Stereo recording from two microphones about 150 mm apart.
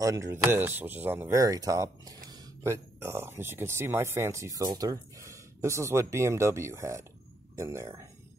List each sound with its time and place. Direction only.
0.0 s speech: 20° right (ahead or behind)